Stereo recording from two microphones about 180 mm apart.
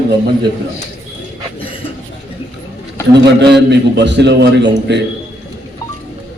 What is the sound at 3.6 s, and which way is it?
A man's voice, 75° right (ahead or behind).